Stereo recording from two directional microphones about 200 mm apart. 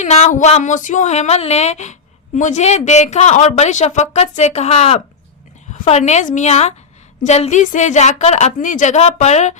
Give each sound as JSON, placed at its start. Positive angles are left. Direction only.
{"t": 0.0, "sound": "speech", "side_deg": 35}